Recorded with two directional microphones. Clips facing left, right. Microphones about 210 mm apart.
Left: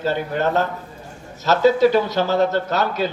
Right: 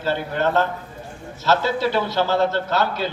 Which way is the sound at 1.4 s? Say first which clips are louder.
Left 6 dB; 40° left (ahead or behind).